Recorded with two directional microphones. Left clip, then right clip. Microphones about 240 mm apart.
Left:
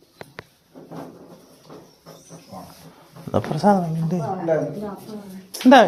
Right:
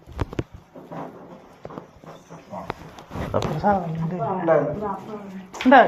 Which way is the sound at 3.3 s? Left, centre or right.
Left.